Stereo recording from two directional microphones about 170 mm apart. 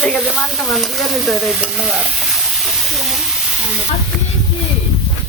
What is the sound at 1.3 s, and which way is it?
Stir, 5° right (ahead or behind).